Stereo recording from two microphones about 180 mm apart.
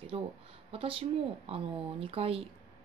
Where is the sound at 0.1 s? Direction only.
35° right (ahead or behind).